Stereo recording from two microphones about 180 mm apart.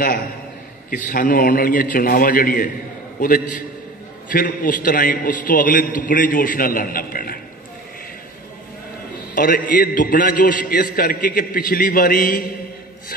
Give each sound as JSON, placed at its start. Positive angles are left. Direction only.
{"t": 0.8, "sound": "a man's voice", "side_deg": 50}
{"t": 9.3, "sound": "a man's voice", "side_deg": 50}